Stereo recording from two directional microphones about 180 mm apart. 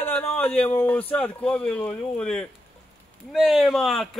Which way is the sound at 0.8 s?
10° left (ahead or behind).